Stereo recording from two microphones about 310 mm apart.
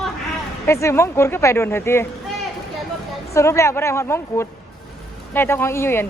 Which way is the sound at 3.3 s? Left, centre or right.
Centre.